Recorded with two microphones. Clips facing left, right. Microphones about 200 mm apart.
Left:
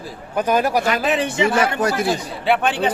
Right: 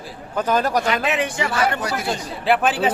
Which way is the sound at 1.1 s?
30° left (ahead or behind).